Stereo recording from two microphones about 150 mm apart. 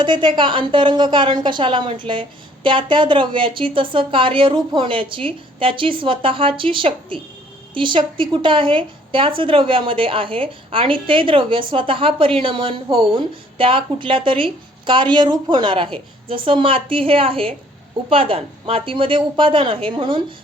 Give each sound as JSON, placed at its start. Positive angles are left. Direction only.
{"t": 0.0, "sound": "a woman's voice", "side_deg": -30}